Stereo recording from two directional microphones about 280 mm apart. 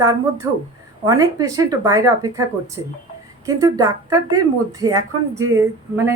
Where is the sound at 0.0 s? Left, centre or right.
Centre.